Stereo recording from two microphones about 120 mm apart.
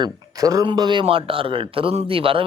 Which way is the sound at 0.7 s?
40° right (ahead or behind).